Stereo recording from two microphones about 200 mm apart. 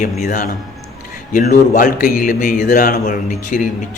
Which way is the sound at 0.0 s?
40° left (ahead or behind).